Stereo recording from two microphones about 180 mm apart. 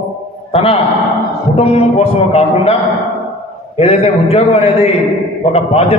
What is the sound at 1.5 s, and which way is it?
Speech, 35° left (ahead or behind).